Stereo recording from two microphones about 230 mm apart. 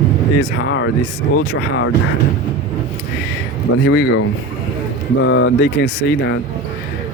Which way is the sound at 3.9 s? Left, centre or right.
Left.